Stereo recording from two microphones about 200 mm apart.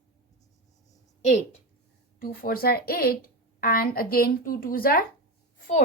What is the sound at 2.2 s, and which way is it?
A woman's voice, 45° left (ahead or behind).